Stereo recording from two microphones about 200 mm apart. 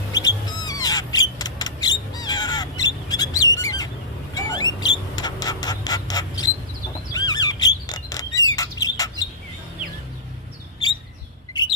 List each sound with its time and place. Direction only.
0.1 s music: 20° left (ahead or behind)
4.4 s a sound: 20° left (ahead or behind)
7.1 s bird: 20° left (ahead or behind)